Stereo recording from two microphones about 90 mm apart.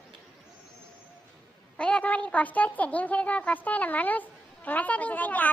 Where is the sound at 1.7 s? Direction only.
10° left (ahead or behind).